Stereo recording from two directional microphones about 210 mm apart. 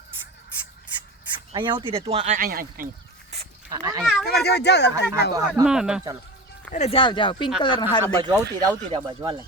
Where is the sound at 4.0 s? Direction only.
Centre (ahead or behind).